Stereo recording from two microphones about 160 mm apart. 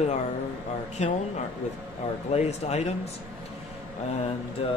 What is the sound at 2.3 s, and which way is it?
Speech, 45° left (ahead or behind).